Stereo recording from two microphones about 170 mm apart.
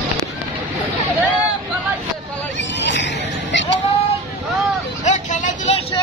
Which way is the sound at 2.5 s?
90° left.